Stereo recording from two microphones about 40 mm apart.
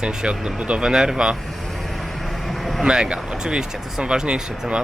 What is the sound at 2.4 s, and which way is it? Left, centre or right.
Vehicle, centre.